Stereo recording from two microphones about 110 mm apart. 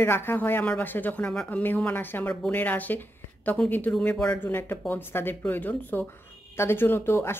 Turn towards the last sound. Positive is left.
turn(degrees=20)  # may be behind; listen again after turning